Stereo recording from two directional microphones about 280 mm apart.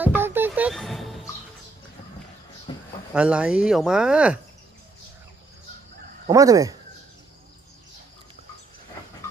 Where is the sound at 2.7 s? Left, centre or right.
Centre.